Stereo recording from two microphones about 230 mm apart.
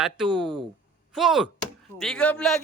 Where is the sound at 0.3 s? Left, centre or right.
Centre.